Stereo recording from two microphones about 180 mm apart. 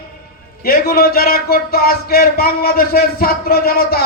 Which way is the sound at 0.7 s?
55° left (ahead or behind).